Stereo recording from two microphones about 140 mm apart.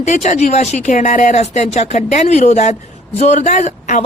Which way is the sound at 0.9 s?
65° left (ahead or behind).